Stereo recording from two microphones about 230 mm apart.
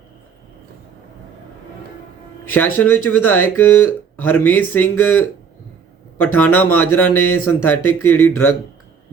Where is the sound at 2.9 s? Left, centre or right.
Left.